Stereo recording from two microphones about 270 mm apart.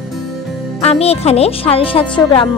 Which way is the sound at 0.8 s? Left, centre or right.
Left.